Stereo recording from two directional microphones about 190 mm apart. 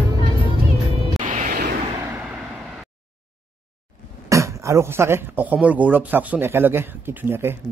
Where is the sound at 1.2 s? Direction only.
40° right (ahead or behind).